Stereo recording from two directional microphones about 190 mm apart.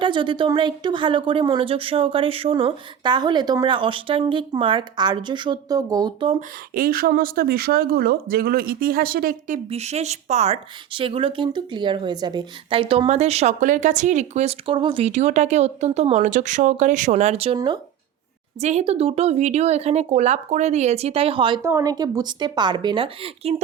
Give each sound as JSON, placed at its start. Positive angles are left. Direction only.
{"t": 0.0, "sound": "a woman's voice", "side_deg": -25}
{"t": 6.7, "sound": "speech", "side_deg": -50}
{"t": 9.6, "sound": "speech", "side_deg": -35}
{"t": 21.6, "sound": "a woman's voice", "side_deg": -15}